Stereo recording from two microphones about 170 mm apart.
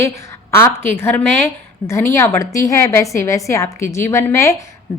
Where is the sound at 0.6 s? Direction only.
15° left (ahead or behind).